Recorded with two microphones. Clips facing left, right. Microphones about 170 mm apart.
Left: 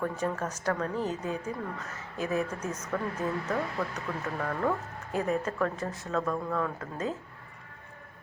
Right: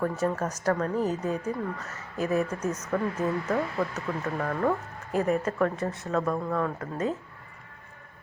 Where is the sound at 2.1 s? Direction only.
35° right (ahead or behind).